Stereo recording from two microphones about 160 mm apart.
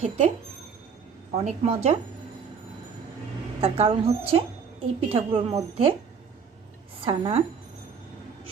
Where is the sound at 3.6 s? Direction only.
40° right (ahead or behind).